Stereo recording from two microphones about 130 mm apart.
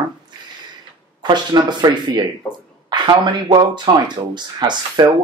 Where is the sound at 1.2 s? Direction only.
35° right (ahead or behind).